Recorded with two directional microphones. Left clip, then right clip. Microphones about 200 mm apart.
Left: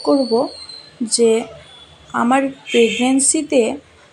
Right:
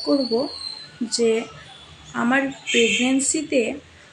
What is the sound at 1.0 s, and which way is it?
Speech, 25° left (ahead or behind).